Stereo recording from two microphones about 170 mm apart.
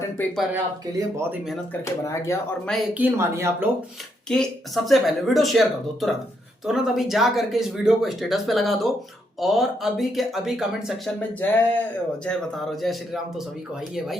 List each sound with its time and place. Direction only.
0.2 s speech: 10° left (ahead or behind)
0.5 s speech: 15° right (ahead or behind)
1.8 s speech: 15° left (ahead or behind)
3.0 s speech: 15° right (ahead or behind)
4.3 s speech: centre (ahead or behind)
11.2 s speech: 10° left (ahead or behind)